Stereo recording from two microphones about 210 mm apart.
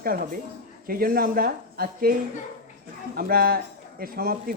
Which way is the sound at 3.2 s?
45° right (ahead or behind).